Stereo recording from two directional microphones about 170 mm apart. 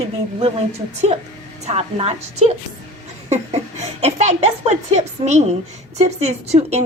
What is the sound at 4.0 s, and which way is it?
A woman's voice, 40° right (ahead or behind).